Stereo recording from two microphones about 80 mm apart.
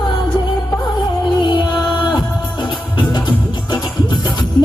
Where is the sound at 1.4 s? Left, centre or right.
Left.